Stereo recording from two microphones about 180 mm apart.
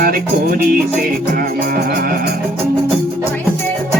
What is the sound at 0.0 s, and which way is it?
Music, 55° right (ahead or behind).